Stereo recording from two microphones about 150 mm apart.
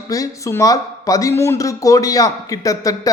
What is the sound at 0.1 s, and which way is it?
A man's voice, 20° left (ahead or behind).